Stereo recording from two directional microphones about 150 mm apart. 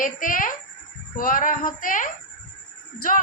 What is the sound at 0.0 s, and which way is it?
A child's voice, 65° left (ahead or behind).